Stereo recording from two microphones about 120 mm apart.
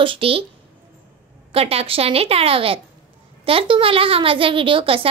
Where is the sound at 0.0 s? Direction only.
50° right (ahead or behind).